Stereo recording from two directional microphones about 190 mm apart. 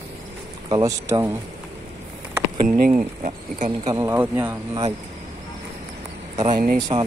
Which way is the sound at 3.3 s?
40° right (ahead or behind).